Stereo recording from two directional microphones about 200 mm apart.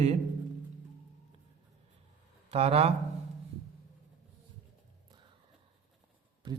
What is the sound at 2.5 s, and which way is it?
Speech, 30° right (ahead or behind).